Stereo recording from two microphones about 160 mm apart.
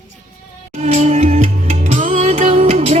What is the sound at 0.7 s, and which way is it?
Music, 45° right (ahead or behind).